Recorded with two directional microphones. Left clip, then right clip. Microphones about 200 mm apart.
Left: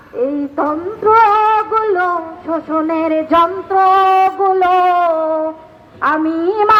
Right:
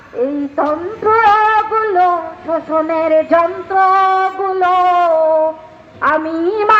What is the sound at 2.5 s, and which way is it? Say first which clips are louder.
Music: right 2 dB; 35° right (ahead or behind).